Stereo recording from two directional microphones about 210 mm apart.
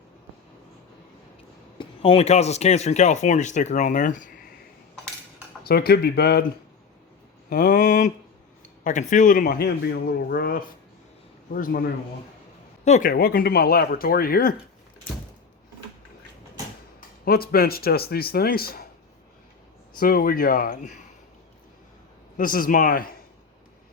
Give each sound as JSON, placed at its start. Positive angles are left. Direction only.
{"t": 1.8, "sound": "speech", "side_deg": 25}
{"t": 5.6, "sound": "speech", "side_deg": 45}
{"t": 7.5, "sound": "speech", "side_deg": 45}
{"t": 12.8, "sound": "speech", "side_deg": 35}
{"t": 17.2, "sound": "speech", "side_deg": 45}
{"t": 20.0, "sound": "speech", "side_deg": 45}
{"t": 22.4, "sound": "speech", "side_deg": 40}